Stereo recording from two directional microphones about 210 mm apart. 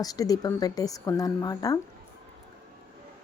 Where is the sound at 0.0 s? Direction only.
15° left (ahead or behind).